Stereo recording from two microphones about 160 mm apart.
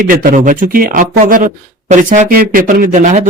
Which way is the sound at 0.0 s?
60° right (ahead or behind).